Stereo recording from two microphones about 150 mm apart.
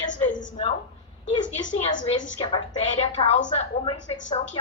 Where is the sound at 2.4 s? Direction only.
35° left (ahead or behind).